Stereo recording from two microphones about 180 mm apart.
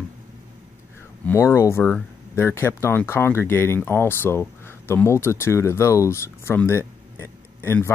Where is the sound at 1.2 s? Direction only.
15° left (ahead or behind).